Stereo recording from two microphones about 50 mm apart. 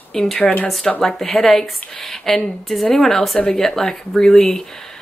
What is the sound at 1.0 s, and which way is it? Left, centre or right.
Speech, centre.